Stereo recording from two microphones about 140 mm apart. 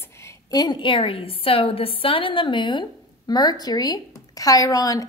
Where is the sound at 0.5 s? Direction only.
30° left (ahead or behind).